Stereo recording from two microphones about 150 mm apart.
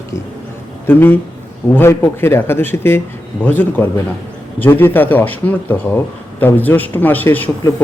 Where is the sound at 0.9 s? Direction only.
15° left (ahead or behind).